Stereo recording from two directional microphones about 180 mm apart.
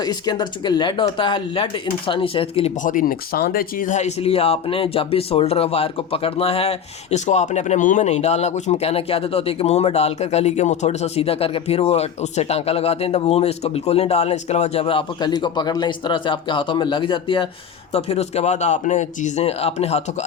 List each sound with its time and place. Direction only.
0.0 s speech: 25° left (ahead or behind)
2.8 s speech: 50° left (ahead or behind)